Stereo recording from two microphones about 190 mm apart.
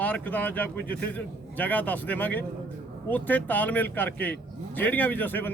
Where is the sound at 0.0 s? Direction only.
10° left (ahead or behind).